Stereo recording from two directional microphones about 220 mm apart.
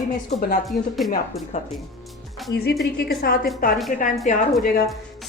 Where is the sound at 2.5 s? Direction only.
45° left (ahead or behind).